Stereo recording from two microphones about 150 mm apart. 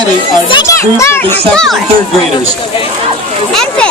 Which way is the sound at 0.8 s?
20° left (ahead or behind).